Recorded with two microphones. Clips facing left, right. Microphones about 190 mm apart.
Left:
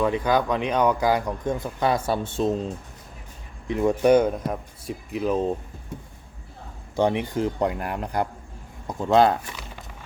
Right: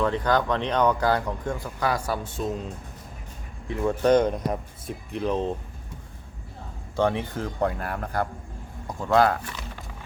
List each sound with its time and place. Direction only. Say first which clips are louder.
0.0 s speech: left 1 dB; 10° left (ahead or behind); by 2.6 s 25° left (ahead or behind)
3.7 s speech: left 3 dB; 15° left (ahead or behind)
6.9 s speech: left 2 dB; 15° left (ahead or behind)